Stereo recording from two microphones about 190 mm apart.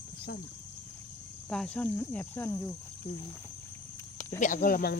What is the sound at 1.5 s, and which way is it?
Speech, 5° left (ahead or behind).